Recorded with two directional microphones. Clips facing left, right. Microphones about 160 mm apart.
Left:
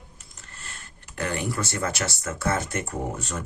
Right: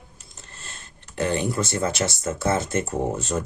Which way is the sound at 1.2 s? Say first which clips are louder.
Right 5 dB; 20° right (ahead or behind).